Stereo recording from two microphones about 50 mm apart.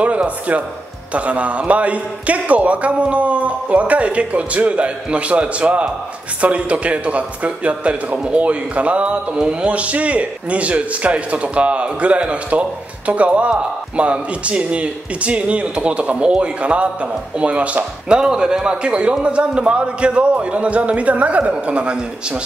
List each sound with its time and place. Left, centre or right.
0.0 s a man's voice: right
18.0 s a man's voice: centre